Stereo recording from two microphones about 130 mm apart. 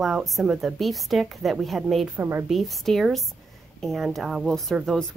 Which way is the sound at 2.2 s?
20° right (ahead or behind).